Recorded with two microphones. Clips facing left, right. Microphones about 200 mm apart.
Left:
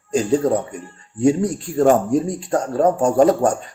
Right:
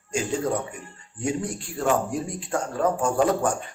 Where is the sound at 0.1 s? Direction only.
35° left (ahead or behind).